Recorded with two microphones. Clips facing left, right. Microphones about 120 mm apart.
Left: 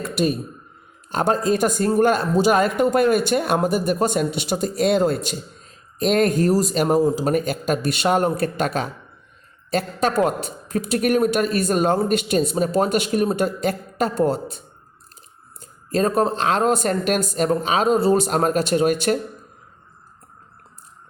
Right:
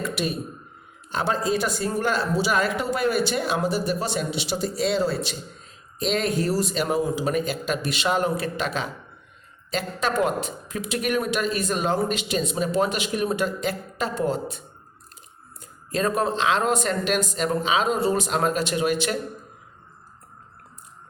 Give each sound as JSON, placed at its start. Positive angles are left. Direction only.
{"t": 0.0, "sound": "speech", "side_deg": 45}
{"t": 15.6, "sound": "speech", "side_deg": 35}